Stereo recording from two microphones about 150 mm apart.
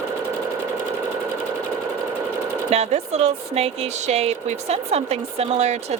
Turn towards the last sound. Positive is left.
turn(degrees=-45)  # may be behind; listen again after turning